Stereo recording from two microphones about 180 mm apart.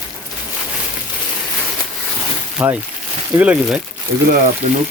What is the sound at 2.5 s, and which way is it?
Speech, 10° right (ahead or behind).